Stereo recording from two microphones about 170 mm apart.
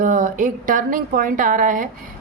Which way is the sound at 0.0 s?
50° right (ahead or behind).